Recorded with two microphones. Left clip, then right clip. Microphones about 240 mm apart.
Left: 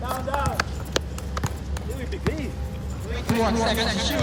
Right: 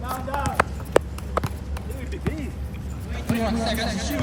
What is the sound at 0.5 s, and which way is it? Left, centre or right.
Clip-clop, right.